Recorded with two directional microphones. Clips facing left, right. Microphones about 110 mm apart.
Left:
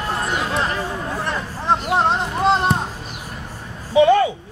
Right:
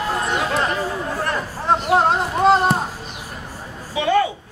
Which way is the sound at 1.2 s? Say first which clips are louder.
Right 1 dB; centre (ahead or behind).